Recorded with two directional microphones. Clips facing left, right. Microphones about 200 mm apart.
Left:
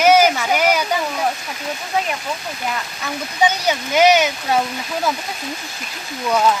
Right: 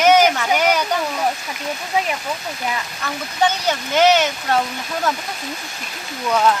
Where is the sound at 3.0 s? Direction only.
10° left (ahead or behind).